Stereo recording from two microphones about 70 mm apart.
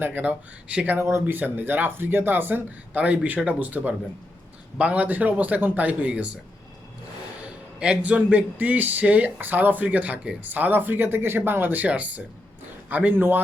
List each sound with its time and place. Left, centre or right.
0.0 s speech: right
0.9 s speech: right
1.4 s speech: right
7.8 s speech: centre